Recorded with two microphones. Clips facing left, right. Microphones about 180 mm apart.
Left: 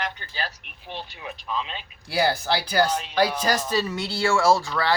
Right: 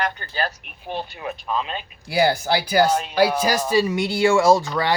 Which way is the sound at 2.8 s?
50° right (ahead or behind).